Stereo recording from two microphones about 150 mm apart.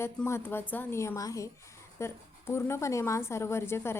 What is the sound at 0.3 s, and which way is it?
A woman's voice, 15° left (ahead or behind).